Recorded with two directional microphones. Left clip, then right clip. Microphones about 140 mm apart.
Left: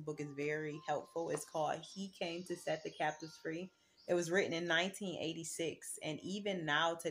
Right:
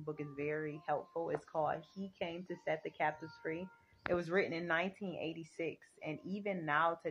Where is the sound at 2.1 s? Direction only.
45° left (ahead or behind).